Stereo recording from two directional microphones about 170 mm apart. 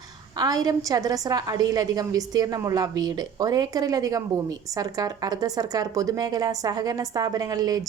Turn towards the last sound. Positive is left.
turn(degrees=-20)  # may be behind; listen again after turning